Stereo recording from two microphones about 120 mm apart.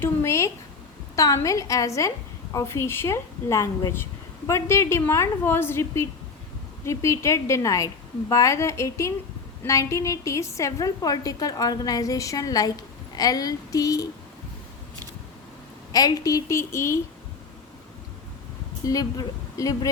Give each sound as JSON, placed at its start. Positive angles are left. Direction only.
{"t": 0.0, "sound": "a woman's voice", "side_deg": 25}
{"t": 15.9, "sound": "a woman's voice", "side_deg": 30}
{"t": 18.9, "sound": "a woman's voice", "side_deg": 30}